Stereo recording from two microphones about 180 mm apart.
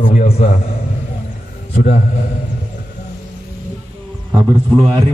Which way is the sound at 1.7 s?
45° left (ahead or behind).